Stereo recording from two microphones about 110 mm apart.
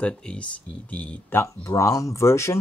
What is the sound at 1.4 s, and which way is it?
Speech, 30° left (ahead or behind).